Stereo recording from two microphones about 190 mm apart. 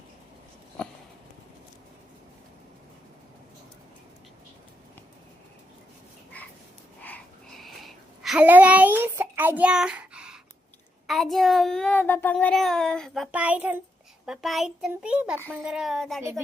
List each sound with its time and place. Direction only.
0.8 s sniff: 5° left (ahead or behind)
7.0 s a sound: 5° left (ahead or behind)
11.0 s child singing: centre (ahead or behind)
13.3 s a child's voice: 5° right (ahead or behind)
14.3 s child singing: centre (ahead or behind)